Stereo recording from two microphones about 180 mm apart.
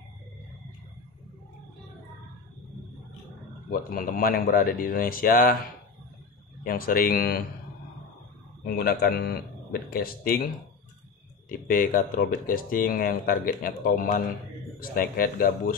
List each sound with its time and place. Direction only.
3.9 s speech: 55° left (ahead or behind)
6.6 s speech: 55° left (ahead or behind)
8.7 s speech: 60° left (ahead or behind)
11.4 s speech: 50° left (ahead or behind)